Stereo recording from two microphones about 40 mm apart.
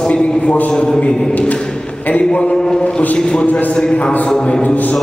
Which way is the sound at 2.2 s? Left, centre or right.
Left.